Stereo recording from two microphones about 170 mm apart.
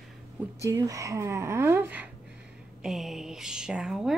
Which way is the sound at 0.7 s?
20° right (ahead or behind).